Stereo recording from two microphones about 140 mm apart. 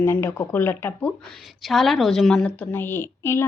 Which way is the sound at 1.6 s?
Centre (ahead or behind).